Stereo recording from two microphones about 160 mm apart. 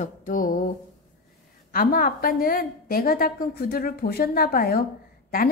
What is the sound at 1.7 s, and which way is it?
A woman's voice, 65° left (ahead or behind).